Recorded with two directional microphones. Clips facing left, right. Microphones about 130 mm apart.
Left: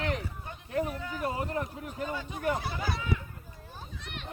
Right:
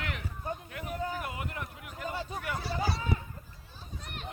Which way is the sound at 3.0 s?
40° right (ahead or behind).